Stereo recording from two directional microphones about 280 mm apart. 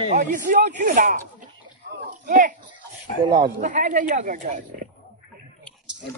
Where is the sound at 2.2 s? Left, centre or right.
Right.